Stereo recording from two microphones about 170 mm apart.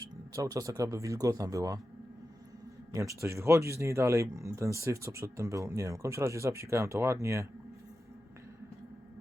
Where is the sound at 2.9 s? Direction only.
20° right (ahead or behind).